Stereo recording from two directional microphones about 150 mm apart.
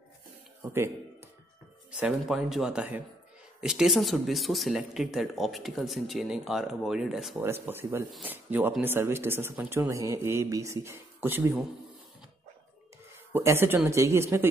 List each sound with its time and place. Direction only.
2.0 s speech: 5° right (ahead or behind)
7.3 s speech: 15° right (ahead or behind)
13.3 s speech: 15° right (ahead or behind)